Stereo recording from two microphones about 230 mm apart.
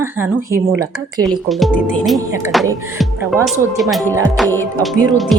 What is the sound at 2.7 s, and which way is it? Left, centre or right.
Speech, centre.